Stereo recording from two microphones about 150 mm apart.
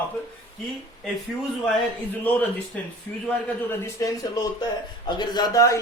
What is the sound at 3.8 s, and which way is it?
Speech, 25° left (ahead or behind).